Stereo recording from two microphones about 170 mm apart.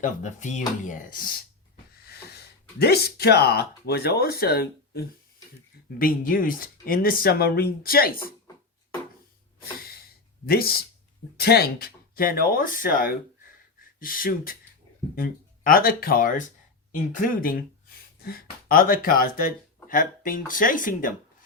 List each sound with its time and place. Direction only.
0.0 s speech: 45° left (ahead or behind)
2.7 s speech: 70° left (ahead or behind)
10.4 s speech: 65° left (ahead or behind)